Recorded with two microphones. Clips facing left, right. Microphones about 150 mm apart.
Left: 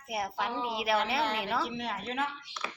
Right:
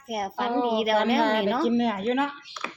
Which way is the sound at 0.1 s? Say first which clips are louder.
Right 6 dB; 50° right (ahead or behind).